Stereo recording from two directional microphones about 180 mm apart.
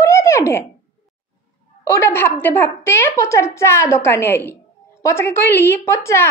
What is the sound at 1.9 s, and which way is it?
A woman's voice, 15° left (ahead or behind).